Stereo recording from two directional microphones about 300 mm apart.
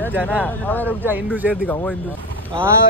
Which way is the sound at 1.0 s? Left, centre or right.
Centre.